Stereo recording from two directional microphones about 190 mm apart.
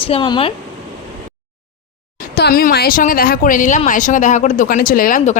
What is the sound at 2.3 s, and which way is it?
A woman's voice, 55° left (ahead or behind).